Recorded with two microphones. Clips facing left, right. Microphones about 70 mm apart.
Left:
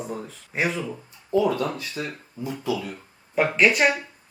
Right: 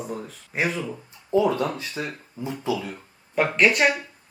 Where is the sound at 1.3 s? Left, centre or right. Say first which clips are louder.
Right 1 dB; right.